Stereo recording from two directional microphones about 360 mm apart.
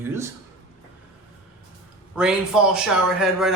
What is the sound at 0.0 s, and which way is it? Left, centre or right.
Speech, centre.